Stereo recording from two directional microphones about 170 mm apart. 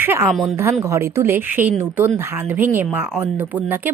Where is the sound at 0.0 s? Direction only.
15° right (ahead or behind).